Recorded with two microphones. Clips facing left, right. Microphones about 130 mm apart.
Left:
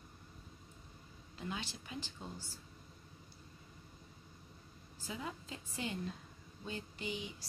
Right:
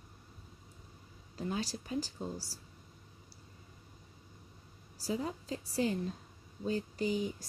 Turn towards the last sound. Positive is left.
turn(degrees=-40)  # may be behind; listen again after turning